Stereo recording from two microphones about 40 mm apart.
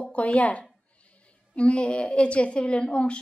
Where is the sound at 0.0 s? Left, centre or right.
Left.